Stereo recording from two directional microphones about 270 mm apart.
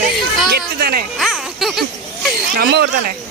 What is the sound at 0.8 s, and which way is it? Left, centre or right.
Music, right.